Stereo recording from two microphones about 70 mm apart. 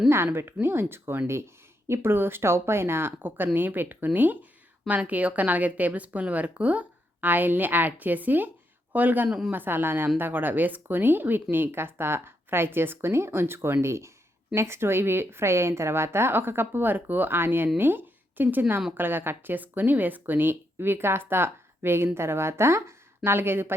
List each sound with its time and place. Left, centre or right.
0.3 s a woman's voice: right